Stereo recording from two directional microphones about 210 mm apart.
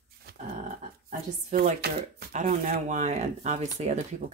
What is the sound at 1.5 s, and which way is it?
Speech, 35° right (ahead or behind).